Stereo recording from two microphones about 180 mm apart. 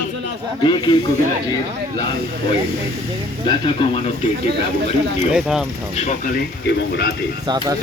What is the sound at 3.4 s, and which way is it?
Speech, 25° left (ahead or behind).